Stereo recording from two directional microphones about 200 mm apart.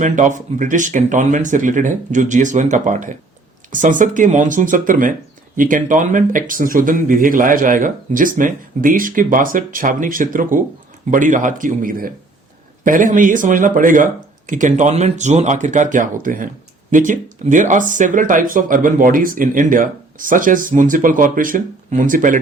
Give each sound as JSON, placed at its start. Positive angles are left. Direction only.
{"t": 0.0, "sound": "speech", "side_deg": -40}